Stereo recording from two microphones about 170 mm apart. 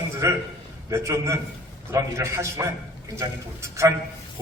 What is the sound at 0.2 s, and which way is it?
A man's voice, 20° right (ahead or behind).